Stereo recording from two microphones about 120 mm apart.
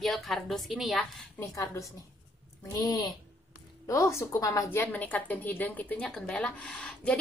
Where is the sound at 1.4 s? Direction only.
25° left (ahead or behind).